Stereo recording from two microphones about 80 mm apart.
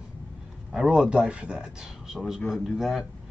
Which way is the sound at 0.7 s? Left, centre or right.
Centre.